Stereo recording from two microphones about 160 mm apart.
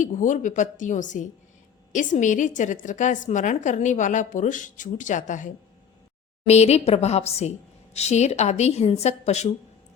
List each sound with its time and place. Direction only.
0.0 s a woman's voice: 50° left (ahead or behind)
6.5 s a woman's voice: 40° left (ahead or behind)